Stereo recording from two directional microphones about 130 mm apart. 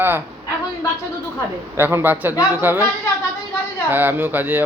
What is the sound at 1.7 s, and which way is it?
Speech, 20° right (ahead or behind).